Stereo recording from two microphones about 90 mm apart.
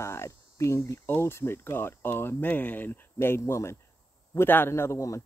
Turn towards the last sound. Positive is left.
turn(degrees=35)  # may be behind; listen again after turning